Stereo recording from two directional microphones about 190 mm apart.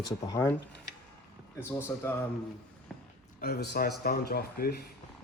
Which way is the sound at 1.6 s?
15° left (ahead or behind).